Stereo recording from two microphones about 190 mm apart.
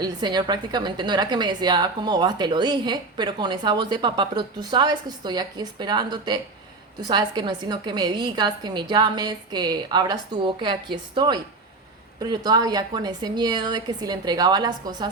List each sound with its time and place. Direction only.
0.0 s a woman's voice: 20° right (ahead or behind)